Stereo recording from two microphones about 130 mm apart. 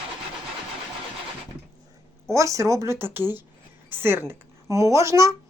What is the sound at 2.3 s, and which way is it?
Speech, 25° right (ahead or behind).